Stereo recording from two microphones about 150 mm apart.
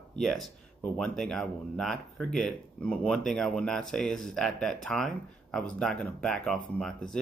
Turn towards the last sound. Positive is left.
turn(degrees=5)  # may be behind; listen again after turning